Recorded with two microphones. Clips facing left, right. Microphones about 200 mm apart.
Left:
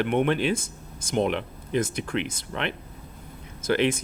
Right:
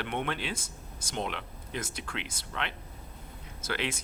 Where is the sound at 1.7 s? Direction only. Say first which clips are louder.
Left 12 dB; 50° left (ahead or behind).